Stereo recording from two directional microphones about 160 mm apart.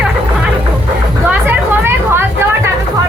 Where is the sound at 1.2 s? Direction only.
10° right (ahead or behind).